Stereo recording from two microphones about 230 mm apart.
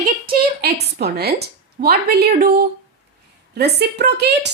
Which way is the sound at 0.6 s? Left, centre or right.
Right.